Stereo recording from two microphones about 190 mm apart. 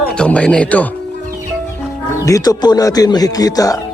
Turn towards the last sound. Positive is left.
turn(degrees=20)  # may be behind; listen again after turning